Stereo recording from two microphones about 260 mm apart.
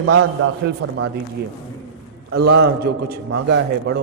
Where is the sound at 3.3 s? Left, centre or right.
Right.